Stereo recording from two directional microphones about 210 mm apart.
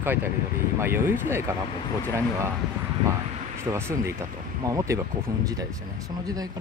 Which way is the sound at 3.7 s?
10° right (ahead or behind).